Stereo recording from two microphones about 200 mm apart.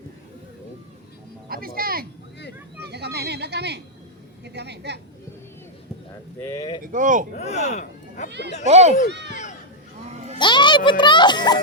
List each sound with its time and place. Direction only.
1.5 s music: 45° right (ahead or behind)
2.8 s a sound: 55° right (ahead or behind)
4.4 s a woman's voice: 55° right (ahead or behind)
6.4 s speech: 15° left (ahead or behind)
6.8 s speech: 40° right (ahead or behind)
7.3 s speech: 35° left (ahead or behind)
8.6 s speech: 35° right (ahead or behind)
9.1 s speech: 60° right (ahead or behind)
10.1 s a sound: 35° right (ahead or behind)
10.3 s a child's voice: 25° left (ahead or behind)